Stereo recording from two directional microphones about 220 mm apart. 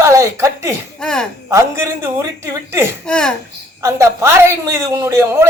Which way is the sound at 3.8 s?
15° right (ahead or behind).